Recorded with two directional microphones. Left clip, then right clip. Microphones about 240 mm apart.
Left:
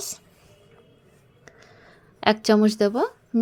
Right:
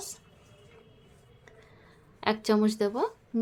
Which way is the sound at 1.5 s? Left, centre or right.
Left.